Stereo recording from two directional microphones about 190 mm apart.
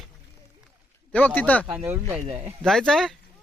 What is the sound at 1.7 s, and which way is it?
Speech, 10° right (ahead or behind).